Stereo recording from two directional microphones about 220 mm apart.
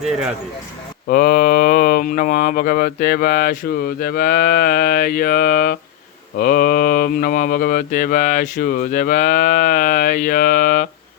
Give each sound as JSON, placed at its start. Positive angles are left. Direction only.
{"t": 1.0, "sound": "speech", "side_deg": 40}